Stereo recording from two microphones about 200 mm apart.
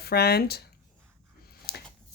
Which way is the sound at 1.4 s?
50° left (ahead or behind).